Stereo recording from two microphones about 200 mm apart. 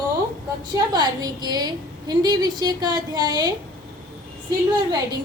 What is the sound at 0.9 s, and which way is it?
A woman's voice, 20° right (ahead or behind).